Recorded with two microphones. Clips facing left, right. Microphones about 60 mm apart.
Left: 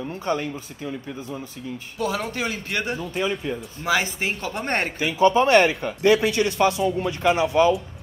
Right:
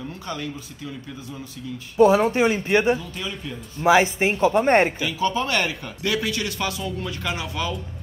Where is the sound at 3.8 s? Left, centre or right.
Right.